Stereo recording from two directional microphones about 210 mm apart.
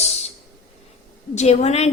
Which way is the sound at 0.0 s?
30° left (ahead or behind).